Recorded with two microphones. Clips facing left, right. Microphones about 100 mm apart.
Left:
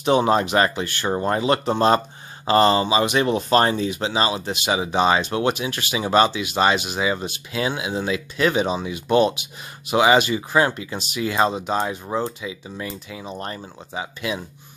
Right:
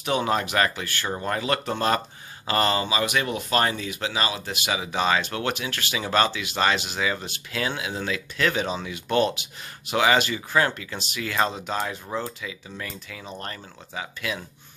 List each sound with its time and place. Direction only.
0.0 s speech: 25° left (ahead or behind)